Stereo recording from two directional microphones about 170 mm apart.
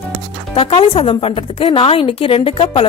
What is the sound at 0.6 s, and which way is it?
A woman's voice, 35° left (ahead or behind).